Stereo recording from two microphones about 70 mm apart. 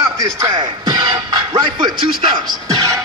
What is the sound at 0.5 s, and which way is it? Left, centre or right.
Music, right.